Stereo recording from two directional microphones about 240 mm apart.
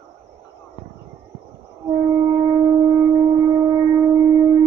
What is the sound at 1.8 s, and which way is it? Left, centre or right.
Shofar, centre.